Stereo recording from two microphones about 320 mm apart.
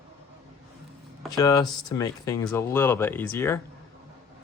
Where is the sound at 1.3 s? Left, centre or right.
Centre.